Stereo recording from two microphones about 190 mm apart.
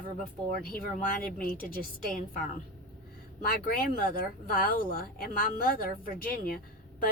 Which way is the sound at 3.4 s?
50° left (ahead or behind).